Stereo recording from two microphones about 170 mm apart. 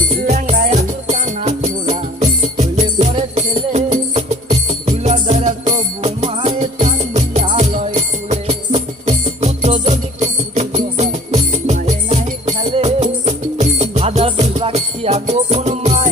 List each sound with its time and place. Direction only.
0.2 s music: 45° right (ahead or behind)
8.4 s music: 35° right (ahead or behind)